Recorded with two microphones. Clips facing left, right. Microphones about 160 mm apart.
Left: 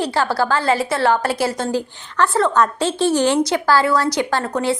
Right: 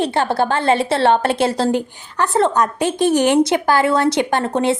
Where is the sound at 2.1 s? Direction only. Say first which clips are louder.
Even; 15° right (ahead or behind).